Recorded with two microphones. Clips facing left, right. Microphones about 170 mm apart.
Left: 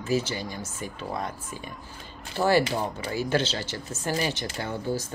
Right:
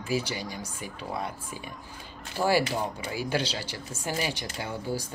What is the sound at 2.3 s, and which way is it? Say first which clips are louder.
Speech: left 2 dB; 10° right (ahead or behind).